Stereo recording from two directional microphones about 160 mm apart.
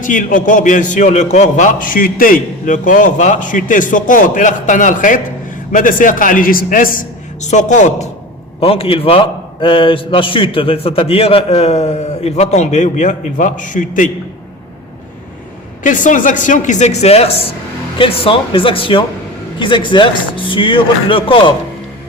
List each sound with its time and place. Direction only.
0.0 s a man's voice: 55° left (ahead or behind)
7.4 s speech: 50° left (ahead or behind)
8.6 s a man's voice: 35° left (ahead or behind); by 14.1 s 55° left (ahead or behind)
15.8 s a man's voice: 55° left (ahead or behind); by 21.5 s 35° left (ahead or behind)